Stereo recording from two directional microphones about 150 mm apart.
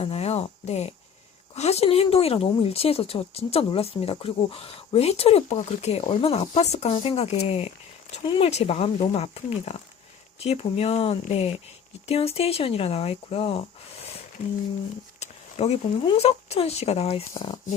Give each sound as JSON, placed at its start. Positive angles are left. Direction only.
{"t": 0.0, "sound": "speech", "side_deg": 40}
{"t": 15.2, "sound": "a sound", "side_deg": 45}
{"t": 16.1, "sound": "speech", "side_deg": 45}